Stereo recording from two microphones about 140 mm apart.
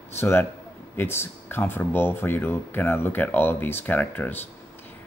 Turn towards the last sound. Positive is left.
turn(degrees=10)  # may be behind; listen again after turning